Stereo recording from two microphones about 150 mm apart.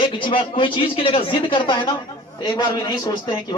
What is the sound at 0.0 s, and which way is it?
A man's voice, 35° left (ahead or behind).